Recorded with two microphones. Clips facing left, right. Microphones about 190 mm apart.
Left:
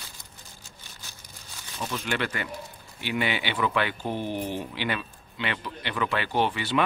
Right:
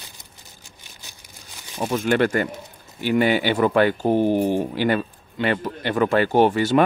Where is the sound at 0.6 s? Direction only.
15° right (ahead or behind).